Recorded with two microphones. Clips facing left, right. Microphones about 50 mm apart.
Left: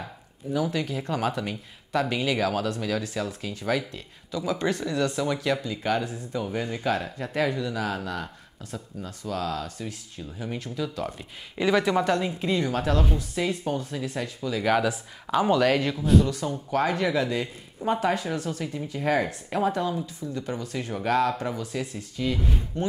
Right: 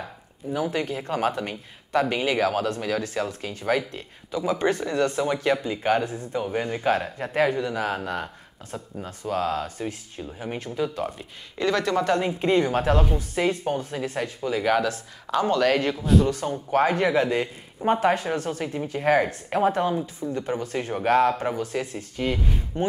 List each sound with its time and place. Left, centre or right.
0.5 s speech: right
7.3 s speech: right
11.5 s speech: centre
12.2 s speech: right
14.6 s speech: centre
16.3 s speech: right